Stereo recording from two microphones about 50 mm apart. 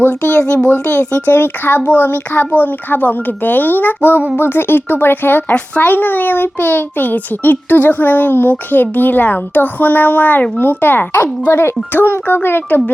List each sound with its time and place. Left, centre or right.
0.0 s a child's voice: left
0.3 s a child's voice: left
0.7 s a child's voice: left